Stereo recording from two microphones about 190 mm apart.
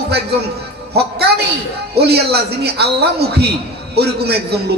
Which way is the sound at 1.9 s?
60° right (ahead or behind).